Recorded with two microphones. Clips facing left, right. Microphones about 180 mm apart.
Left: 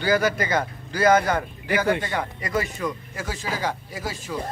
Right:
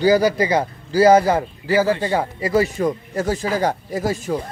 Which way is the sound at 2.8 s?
40° right (ahead or behind).